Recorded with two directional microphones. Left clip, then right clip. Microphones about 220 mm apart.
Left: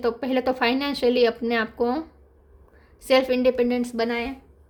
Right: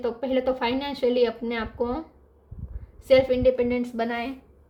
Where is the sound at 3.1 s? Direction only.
50° left (ahead or behind).